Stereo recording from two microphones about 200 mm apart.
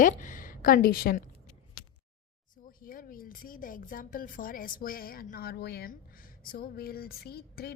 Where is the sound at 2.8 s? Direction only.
45° left (ahead or behind).